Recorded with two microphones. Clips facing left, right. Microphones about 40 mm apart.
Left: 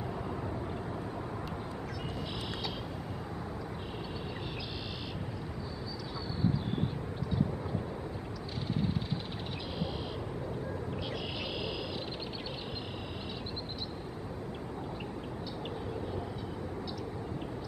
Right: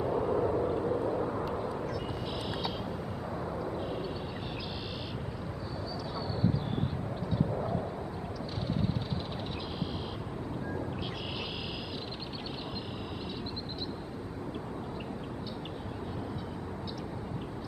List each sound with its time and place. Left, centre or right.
0.0 s vehicle: centre